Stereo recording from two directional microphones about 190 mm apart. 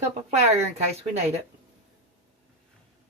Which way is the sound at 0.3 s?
35° right (ahead or behind).